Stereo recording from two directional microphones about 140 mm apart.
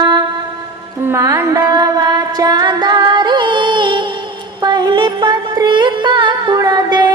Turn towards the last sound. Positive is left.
turn(degrees=-30)  # may be behind; listen again after turning